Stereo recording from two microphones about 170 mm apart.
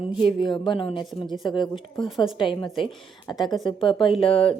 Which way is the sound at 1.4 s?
25° left (ahead or behind).